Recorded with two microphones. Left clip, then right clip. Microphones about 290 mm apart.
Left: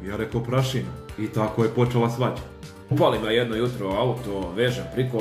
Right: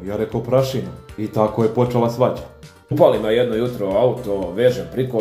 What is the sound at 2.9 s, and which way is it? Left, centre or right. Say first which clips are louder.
Speech: right 6 dB; centre.